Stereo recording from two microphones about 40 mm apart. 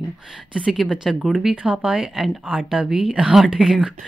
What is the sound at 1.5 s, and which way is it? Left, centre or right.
Speech, right.